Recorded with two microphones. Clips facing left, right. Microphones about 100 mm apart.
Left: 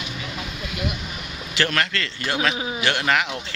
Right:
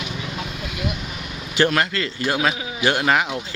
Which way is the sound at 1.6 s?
15° right (ahead or behind).